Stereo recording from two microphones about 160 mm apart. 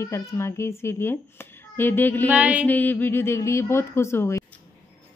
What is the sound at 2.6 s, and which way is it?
A woman's voice, 10° left (ahead or behind).